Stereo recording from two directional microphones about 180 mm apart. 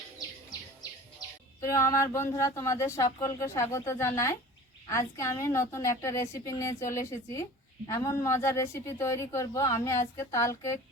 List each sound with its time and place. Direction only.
1.6 s speech: 15° left (ahead or behind)